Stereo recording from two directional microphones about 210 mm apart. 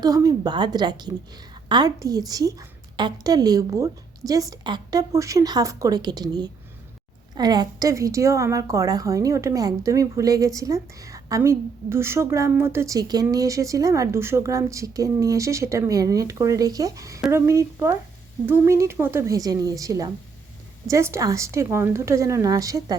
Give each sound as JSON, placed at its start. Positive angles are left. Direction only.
{"t": 0.0, "sound": "a woman's voice", "side_deg": -20}
{"t": 17.2, "sound": "speech", "side_deg": -5}
{"t": 17.4, "sound": "a woman's voice", "side_deg": -15}